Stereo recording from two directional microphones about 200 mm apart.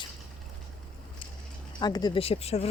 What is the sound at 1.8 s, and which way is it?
Speech, 20° left (ahead or behind).